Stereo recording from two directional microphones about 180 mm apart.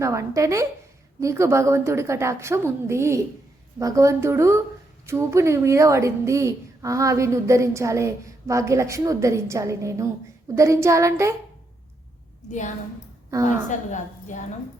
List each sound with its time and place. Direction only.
0.0 s a woman's voice: 15° right (ahead or behind)
12.5 s a woman's voice: 45° left (ahead or behind)